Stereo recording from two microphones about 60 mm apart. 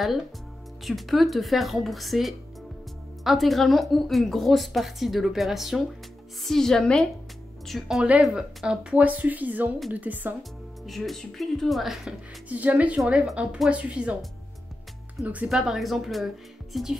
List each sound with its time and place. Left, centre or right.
0.8 s speech: centre
6.4 s a woman's voice: centre
8.9 s speech: right
10.9 s speech: centre
12.4 s speech: right
15.4 s speech: centre